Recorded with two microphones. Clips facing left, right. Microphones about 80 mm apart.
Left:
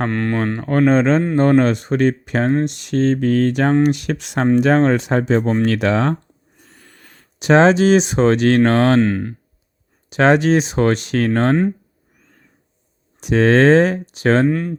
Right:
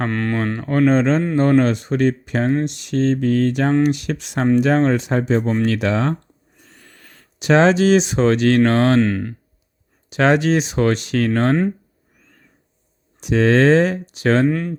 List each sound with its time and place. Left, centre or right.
0.1 s speech: centre
0.6 s speech: left
5.6 s speech: left
7.3 s speech: left
9.0 s speech: centre
10.1 s speech: left
13.1 s speech: left
14.4 s speech: centre